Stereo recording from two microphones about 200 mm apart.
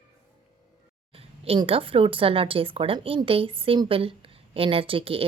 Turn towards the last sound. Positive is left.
turn(degrees=-30)  # may be behind; listen again after turning